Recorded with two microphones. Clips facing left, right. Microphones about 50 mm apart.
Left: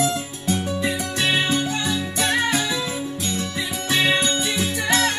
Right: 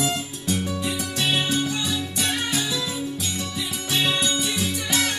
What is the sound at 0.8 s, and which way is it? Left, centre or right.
Music, left.